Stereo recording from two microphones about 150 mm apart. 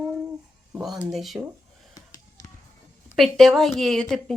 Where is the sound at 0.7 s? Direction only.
5° right (ahead or behind).